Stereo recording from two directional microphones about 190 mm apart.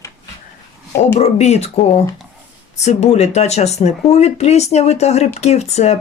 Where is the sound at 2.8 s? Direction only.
35° left (ahead or behind).